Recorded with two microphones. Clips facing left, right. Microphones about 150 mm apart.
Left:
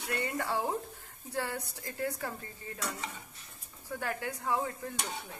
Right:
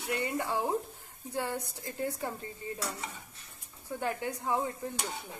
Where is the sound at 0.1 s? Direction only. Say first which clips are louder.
Right 1 dB; 15° right (ahead or behind).